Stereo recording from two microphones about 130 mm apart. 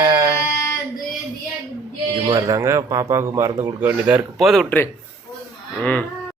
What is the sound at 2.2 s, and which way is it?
Speech, 25° right (ahead or behind).